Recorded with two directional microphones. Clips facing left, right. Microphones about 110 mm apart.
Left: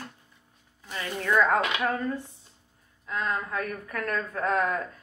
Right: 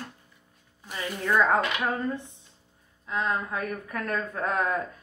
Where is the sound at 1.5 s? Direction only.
20° right (ahead or behind).